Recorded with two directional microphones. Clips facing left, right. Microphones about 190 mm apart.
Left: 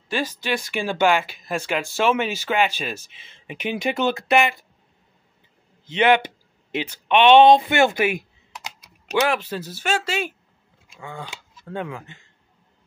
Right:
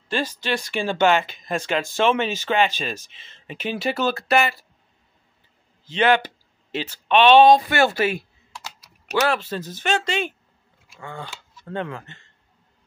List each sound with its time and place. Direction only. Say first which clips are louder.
0.4 s speech: even; 10° left (ahead or behind)
5.9 s speech: left 1 dB; 20° left (ahead or behind)